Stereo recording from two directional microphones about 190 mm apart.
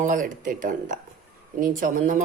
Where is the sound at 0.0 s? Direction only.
45° right (ahead or behind).